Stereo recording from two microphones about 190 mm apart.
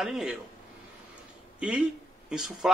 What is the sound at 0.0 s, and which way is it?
Speech, centre (ahead or behind).